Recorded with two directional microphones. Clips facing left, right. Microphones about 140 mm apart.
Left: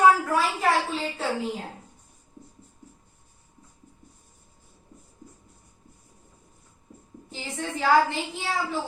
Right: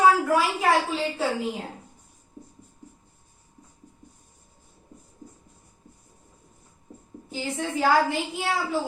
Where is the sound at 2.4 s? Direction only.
30° right (ahead or behind).